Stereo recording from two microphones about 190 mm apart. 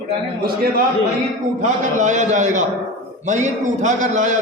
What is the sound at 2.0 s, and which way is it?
A man's voice, 40° right (ahead or behind).